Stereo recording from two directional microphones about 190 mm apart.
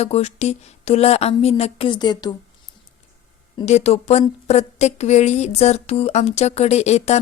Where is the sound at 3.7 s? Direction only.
35° left (ahead or behind).